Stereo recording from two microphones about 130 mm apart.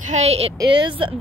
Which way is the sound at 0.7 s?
40° right (ahead or behind).